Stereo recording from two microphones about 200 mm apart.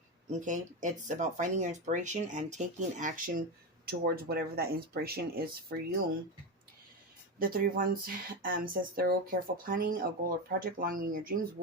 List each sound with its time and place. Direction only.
0.3 s speech: 40° right (ahead or behind)
7.3 s speech: 45° right (ahead or behind)